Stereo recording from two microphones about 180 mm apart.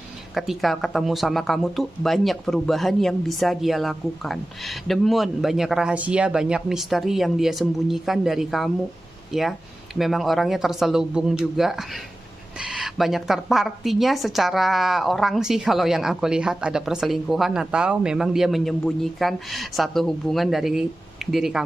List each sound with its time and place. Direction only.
0.3 s speech: centre (ahead or behind)